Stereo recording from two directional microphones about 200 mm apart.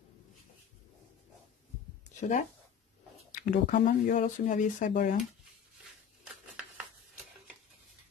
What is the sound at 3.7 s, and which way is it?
Speech, 40° left (ahead or behind).